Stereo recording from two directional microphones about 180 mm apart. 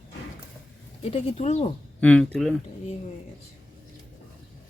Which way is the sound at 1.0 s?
30° left (ahead or behind).